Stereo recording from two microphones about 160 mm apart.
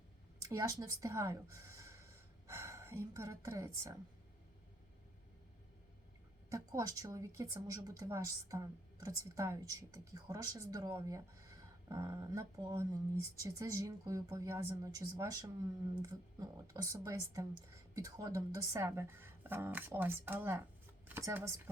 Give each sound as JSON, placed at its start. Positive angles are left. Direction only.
{"t": 0.4, "sound": "a woman's voice", "side_deg": -20}
{"t": 6.5, "sound": "speech", "side_deg": -20}